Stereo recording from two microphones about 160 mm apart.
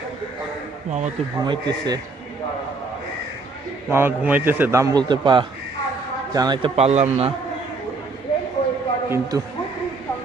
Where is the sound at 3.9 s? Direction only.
15° right (ahead or behind).